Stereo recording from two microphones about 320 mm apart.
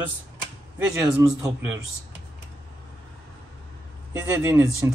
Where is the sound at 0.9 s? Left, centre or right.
Centre.